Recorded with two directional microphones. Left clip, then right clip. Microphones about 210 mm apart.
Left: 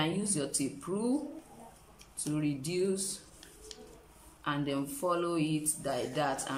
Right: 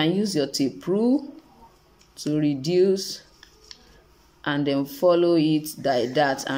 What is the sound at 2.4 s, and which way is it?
Speech, 30° right (ahead or behind).